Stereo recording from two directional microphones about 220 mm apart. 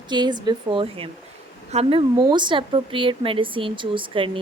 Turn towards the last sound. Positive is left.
turn(degrees=-25)  # may be behind; listen again after turning